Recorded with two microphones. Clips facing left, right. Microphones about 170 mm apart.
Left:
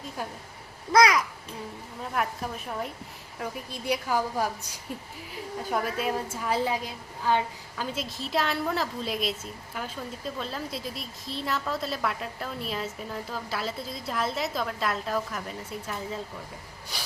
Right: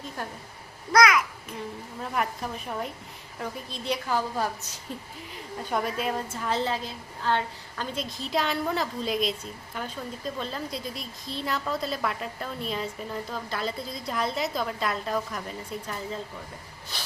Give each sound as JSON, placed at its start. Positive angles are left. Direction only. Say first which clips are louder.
{"t": 0.2, "sound": "a woman's voice", "louder": "left 1 dB", "side_deg": 10}
{"t": 0.9, "sound": "a child's voice", "louder": "even", "side_deg": 35}
{"t": 2.0, "sound": "a woman's voice", "louder": "even", "side_deg": 0}